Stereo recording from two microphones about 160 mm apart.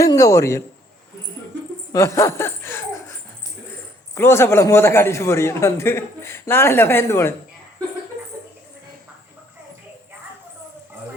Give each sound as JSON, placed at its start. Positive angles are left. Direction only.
{"t": 0.0, "sound": "a man's voice", "side_deg": 20}
{"t": 1.9, "sound": "speech", "side_deg": 15}
{"t": 4.1, "sound": "a man's voice", "side_deg": 15}